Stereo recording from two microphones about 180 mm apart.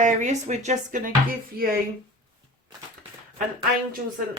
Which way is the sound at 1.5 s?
55° right (ahead or behind).